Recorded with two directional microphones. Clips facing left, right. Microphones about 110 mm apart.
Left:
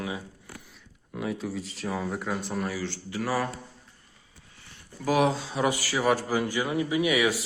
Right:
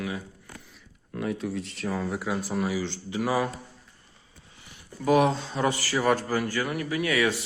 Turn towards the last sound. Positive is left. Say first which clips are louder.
# left 1 dB
turn(degrees=15)  # may be behind; listen again after turning